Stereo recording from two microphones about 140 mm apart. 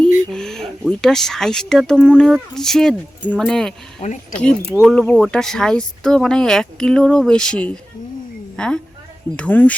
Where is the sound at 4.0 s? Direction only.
60° left (ahead or behind).